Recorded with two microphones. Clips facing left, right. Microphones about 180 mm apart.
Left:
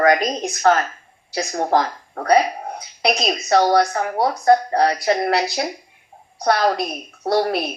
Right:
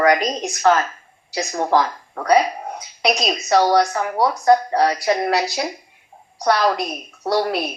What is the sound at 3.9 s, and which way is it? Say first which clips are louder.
Speech: even; 45° left (ahead or behind).